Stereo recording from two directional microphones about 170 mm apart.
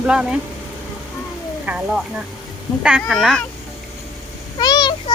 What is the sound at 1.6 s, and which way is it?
Speech, 5° right (ahead or behind).